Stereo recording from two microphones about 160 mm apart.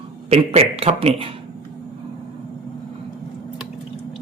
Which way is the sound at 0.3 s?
40° right (ahead or behind).